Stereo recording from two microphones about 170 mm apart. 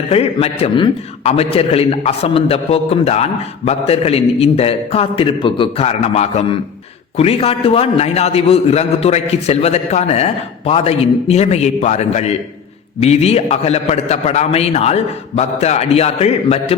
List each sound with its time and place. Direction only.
0.1 s a man's voice: 35° left (ahead or behind)